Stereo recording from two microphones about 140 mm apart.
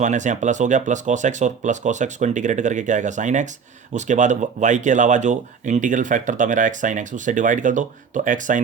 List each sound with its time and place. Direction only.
0.0 s speech: 60° right (ahead or behind)